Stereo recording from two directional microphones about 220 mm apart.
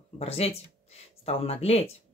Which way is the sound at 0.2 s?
25° left (ahead or behind).